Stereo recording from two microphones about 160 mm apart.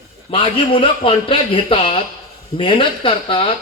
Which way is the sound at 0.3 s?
35° left (ahead or behind).